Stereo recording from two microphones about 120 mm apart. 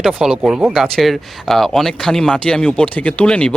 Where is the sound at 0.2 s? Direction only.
5° right (ahead or behind).